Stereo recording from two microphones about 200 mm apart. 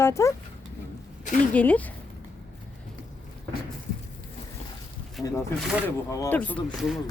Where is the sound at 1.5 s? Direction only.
5° left (ahead or behind).